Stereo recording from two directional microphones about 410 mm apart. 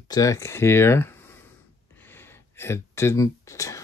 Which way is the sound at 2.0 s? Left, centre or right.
Centre.